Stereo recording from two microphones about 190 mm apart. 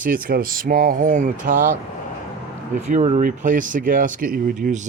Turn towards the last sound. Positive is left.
turn(degrees=-40)  # may be behind; listen again after turning